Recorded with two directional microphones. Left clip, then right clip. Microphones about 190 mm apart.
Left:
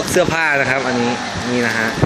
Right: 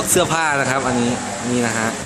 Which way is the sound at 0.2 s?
5° right (ahead or behind).